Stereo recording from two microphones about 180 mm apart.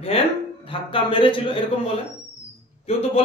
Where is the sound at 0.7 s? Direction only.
30° left (ahead or behind).